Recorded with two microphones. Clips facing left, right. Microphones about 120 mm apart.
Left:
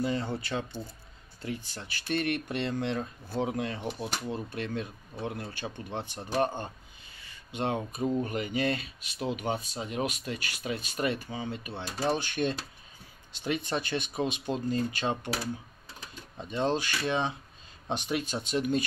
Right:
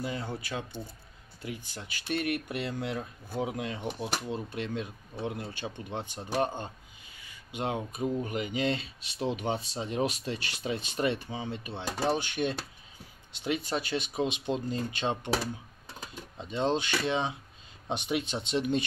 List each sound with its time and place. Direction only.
0.0 s speech: 5° right (ahead or behind)
6.6 s a sound: 15° right (ahead or behind)
8.2 s speech: 15° right (ahead or behind)